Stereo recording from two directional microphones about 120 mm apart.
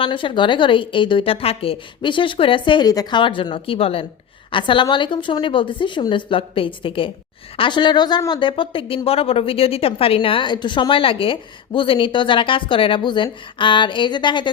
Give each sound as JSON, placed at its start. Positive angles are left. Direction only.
{"t": 0.0, "sound": "a woman's voice", "side_deg": 45}